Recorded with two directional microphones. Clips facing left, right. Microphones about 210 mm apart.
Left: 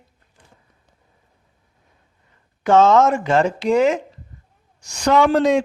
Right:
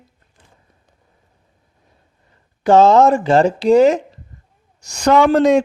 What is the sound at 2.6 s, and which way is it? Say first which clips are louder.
Speech: right 3 dB; 35° right (ahead or behind).